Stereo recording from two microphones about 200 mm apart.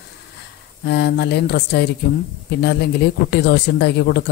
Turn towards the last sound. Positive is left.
turn(degrees=55)  # may be behind; listen again after turning